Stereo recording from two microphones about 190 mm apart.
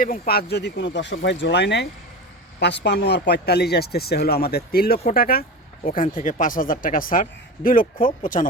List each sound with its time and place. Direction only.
0.0 s speech: 50° left (ahead or behind)